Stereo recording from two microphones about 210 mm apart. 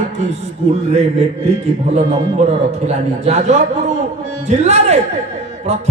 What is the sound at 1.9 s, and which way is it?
Speech, 30° right (ahead or behind).